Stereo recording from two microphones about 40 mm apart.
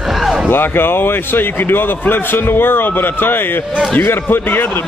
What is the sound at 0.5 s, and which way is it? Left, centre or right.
A man's voice, left.